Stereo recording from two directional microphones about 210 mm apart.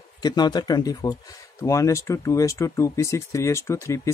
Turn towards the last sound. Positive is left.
turn(degrees=15)  # may be behind; listen again after turning